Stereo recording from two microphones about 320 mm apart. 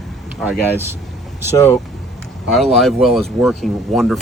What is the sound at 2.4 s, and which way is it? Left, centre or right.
Speech, centre.